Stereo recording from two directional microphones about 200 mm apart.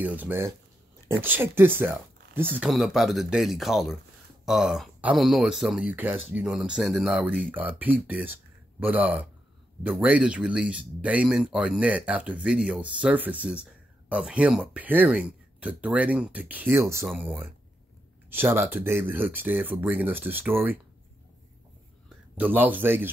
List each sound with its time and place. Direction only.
0.0 s speech: 10° right (ahead or behind)
22.4 s speech: 10° right (ahead or behind)